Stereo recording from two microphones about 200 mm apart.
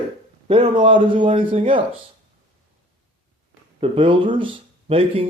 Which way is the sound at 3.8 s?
25° right (ahead or behind).